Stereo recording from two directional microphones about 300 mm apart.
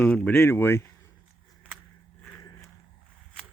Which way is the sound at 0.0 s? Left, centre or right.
Centre.